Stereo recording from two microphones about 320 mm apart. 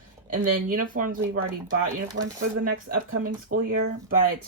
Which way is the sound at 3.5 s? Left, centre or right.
Right.